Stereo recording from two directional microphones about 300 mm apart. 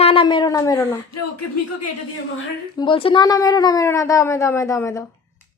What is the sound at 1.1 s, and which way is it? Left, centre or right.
Speech, left.